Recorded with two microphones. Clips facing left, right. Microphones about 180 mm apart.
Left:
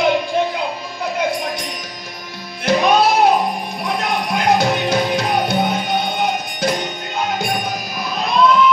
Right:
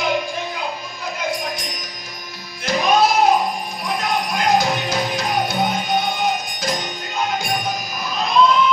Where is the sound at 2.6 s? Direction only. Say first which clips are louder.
Left 3 dB; 60° left (ahead or behind).